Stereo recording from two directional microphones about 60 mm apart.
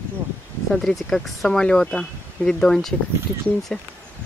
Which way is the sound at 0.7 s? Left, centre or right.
Centre.